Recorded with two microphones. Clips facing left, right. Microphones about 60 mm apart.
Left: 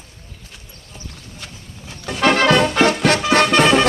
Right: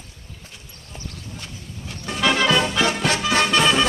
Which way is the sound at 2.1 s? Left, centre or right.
Left.